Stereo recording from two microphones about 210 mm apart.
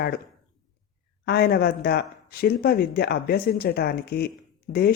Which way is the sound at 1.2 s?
50° left (ahead or behind).